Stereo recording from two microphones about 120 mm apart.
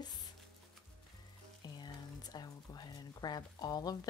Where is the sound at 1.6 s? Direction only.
35° left (ahead or behind).